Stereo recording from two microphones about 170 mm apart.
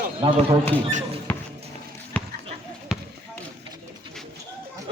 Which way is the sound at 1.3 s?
10° left (ahead or behind).